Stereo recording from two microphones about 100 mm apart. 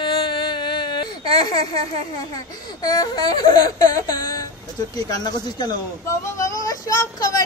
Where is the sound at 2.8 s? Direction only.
40° left (ahead or behind).